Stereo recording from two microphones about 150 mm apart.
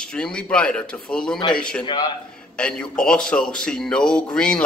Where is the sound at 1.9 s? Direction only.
30° left (ahead or behind).